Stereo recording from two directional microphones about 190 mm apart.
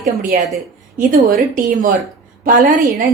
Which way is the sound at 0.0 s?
50° right (ahead or behind).